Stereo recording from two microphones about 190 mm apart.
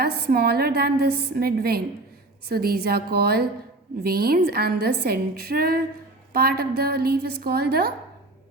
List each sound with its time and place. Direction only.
0.0 s a woman's voice: 55° right (ahead or behind)